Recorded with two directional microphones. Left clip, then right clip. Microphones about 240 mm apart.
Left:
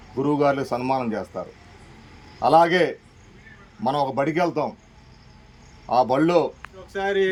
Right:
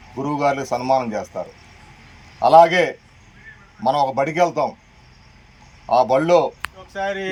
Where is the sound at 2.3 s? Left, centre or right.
Centre.